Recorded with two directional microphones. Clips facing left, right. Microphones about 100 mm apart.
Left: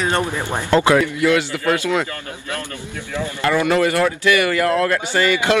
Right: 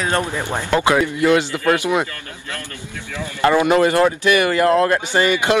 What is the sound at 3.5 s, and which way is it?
Speech, 25° right (ahead or behind).